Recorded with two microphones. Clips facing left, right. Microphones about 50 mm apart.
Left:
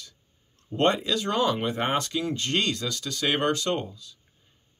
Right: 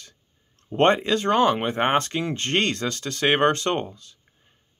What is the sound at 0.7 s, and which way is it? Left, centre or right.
Speech, right.